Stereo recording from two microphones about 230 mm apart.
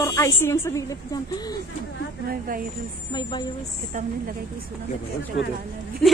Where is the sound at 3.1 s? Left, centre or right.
Centre.